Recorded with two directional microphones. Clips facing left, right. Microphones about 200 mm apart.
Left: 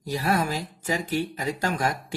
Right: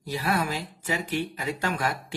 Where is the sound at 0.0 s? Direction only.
40° left (ahead or behind).